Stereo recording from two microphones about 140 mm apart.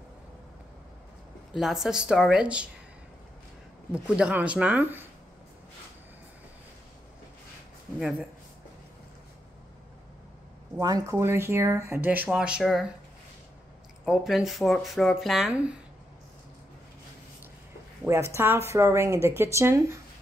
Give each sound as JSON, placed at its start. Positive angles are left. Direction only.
{"t": 1.5, "sound": "speech", "side_deg": -5}
{"t": 3.9, "sound": "speech", "side_deg": -10}
{"t": 10.8, "sound": "speech", "side_deg": -25}
{"t": 14.0, "sound": "speech", "side_deg": 0}
{"t": 18.0, "sound": "speech", "side_deg": -20}